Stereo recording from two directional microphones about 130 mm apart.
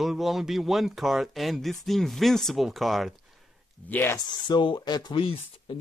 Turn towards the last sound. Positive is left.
turn(degrees=35)  # may be behind; listen again after turning